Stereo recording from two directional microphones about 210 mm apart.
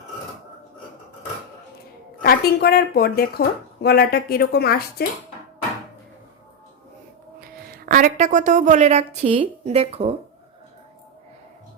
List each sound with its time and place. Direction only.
2.2 s speech: 45° left (ahead or behind)
7.4 s a woman's voice: 40° right (ahead or behind)